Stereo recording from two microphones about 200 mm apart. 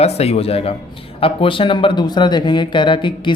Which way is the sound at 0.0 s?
30° left (ahead or behind).